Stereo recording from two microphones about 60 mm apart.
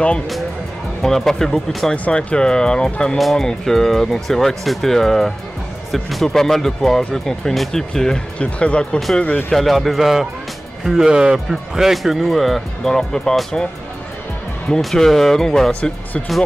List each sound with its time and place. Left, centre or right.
1.0 s speech: centre; by 9.5 s left
9.5 s speech: centre
14.8 s speech: centre
15.7 s speech: left